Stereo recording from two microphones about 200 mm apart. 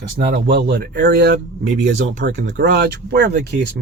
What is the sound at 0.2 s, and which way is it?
Speech, 55° right (ahead or behind).